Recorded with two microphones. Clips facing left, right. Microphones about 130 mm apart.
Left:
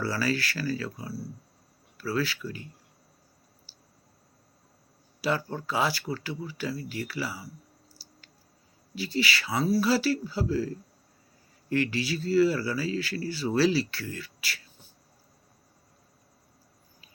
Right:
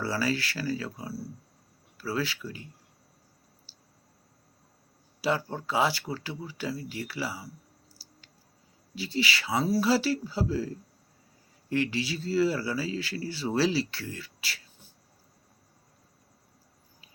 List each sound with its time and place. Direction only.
0.0 s speech: 20° right (ahead or behind)
5.2 s speech: 20° right (ahead or behind)
9.0 s speech: 25° right (ahead or behind)